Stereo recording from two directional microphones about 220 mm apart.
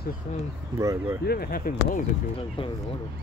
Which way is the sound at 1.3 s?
45° left (ahead or behind).